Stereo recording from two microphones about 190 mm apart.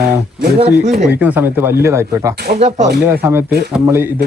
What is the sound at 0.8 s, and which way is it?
Speech, 40° right (ahead or behind).